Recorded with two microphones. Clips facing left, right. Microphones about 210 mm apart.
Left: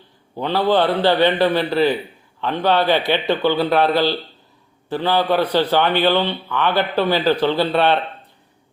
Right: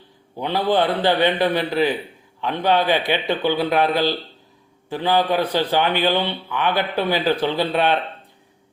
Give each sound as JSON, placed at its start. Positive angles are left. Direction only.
{"t": 0.3, "sound": "speech", "side_deg": -15}